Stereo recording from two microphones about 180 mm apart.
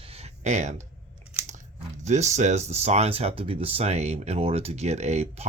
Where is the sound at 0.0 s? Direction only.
35° right (ahead or behind).